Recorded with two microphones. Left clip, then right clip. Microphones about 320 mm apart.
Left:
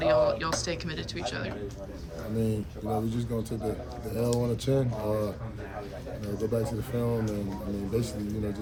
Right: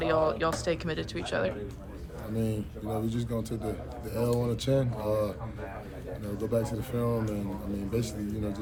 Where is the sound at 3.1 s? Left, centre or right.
Centre.